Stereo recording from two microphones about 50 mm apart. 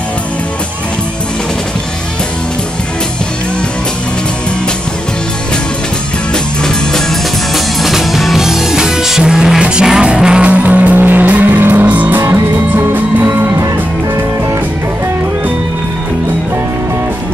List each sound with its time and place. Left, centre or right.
6.3 s music: centre
7.5 s music: centre
10.5 s music: right